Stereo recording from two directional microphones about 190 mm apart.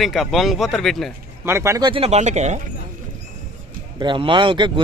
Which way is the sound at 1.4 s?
15° right (ahead or behind).